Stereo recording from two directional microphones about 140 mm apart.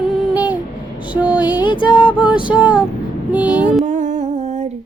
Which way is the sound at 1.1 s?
10° right (ahead or behind).